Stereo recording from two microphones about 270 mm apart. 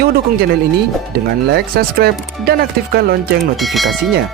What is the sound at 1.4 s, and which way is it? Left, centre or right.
Speech, right.